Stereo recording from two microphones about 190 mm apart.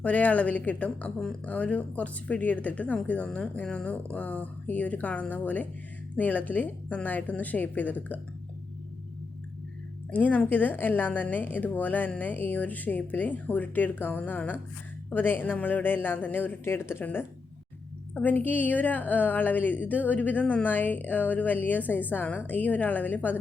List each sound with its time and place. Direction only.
0.0 s speech: 5° left (ahead or behind)
10.1 s speech: 10° left (ahead or behind)